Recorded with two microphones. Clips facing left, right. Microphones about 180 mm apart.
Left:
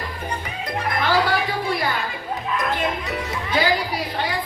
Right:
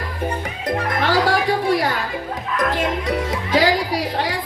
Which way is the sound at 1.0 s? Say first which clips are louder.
Right 3 dB; 90° right.